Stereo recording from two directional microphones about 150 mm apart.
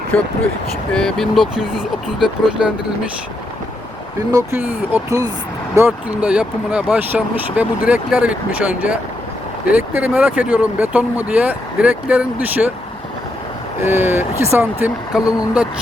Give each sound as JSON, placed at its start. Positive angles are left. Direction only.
{"t": 0.1, "sound": "speech", "side_deg": 10}
{"t": 4.3, "sound": "speech", "side_deg": -25}
{"t": 4.6, "sound": "speech", "side_deg": -10}
{"t": 5.7, "sound": "speech", "side_deg": -10}
{"t": 13.8, "sound": "speech", "side_deg": -15}